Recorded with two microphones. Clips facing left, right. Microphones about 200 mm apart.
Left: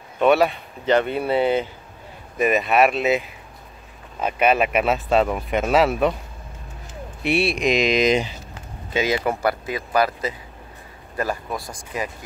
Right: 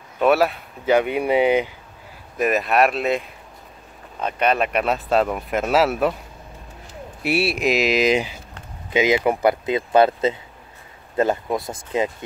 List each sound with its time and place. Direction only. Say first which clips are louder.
0.2 s speech: even; centre (ahead or behind)
2.3 s speech: left 1 dB; centre (ahead or behind)
7.2 s speech: even; 5° right (ahead or behind)
8.9 s speech: right 4 dB; 20° right (ahead or behind)